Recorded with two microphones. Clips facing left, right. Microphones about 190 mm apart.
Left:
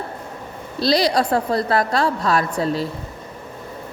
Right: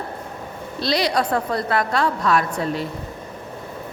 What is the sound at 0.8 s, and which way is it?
A woman's voice, 35° left (ahead or behind).